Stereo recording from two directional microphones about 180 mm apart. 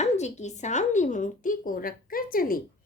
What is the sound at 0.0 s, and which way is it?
Speech, 40° left (ahead or behind).